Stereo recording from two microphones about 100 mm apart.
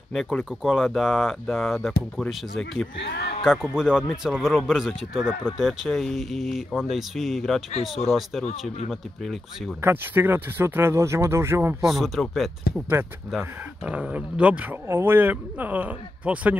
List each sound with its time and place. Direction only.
0.1 s speech: centre (ahead or behind)
9.8 s speech: 25° right (ahead or behind)
11.8 s speech: centre (ahead or behind)
13.0 s speech: 20° right (ahead or behind)
14.9 s speech: 25° right (ahead or behind)